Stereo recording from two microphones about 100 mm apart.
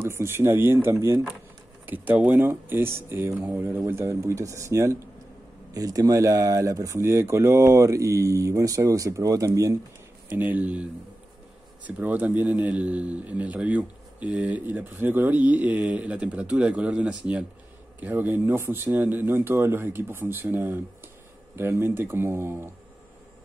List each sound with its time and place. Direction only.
0.0 s speech: 25° right (ahead or behind)
1.9 s speech: 15° right (ahead or behind); by 9.5 s 35° right (ahead or behind)
10.3 s a man's voice: 15° right (ahead or behind)